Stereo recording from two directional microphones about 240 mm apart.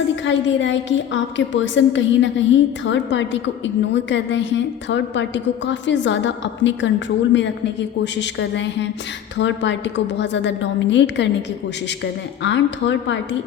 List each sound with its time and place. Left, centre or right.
0.3 s a woman's voice: left
12.4 s a woman's voice: left